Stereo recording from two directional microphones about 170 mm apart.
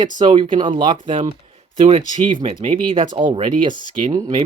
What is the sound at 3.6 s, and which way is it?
Speech, 30° right (ahead or behind).